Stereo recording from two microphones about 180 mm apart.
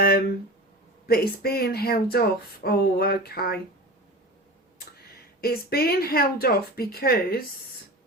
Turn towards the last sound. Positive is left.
turn(degrees=55)  # may be behind; listen again after turning